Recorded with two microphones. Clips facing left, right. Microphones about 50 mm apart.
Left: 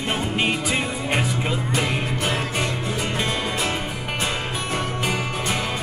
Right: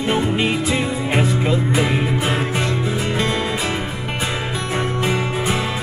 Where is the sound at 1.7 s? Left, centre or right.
Centre.